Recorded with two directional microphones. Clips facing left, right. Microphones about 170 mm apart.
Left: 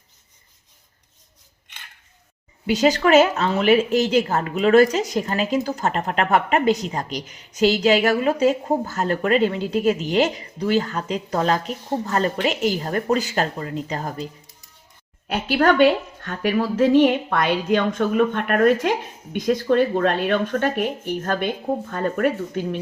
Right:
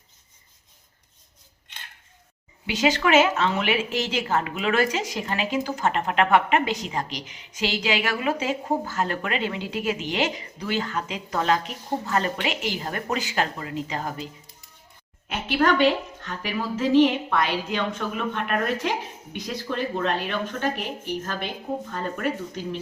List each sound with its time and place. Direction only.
2.6 s a woman's voice: 40° left (ahead or behind)
15.3 s a woman's voice: 45° left (ahead or behind)